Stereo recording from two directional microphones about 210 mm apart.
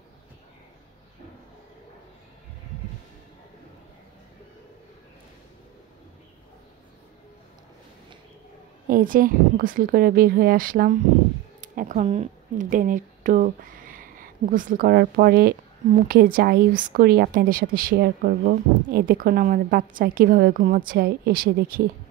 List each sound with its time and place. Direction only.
8.8 s speech: 40° right (ahead or behind)